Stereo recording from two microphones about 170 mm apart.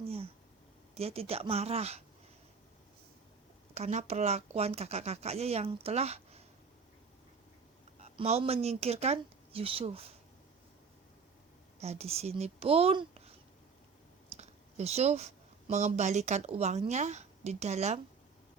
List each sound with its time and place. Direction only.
0.0 s a sound: 35° right (ahead or behind)
0.9 s speech: 35° right (ahead or behind)
3.8 s speech: 40° right (ahead or behind)
7.9 s speech: 40° right (ahead or behind)
11.8 s a child's voice: 40° right (ahead or behind)
14.3 s speech: 40° right (ahead or behind)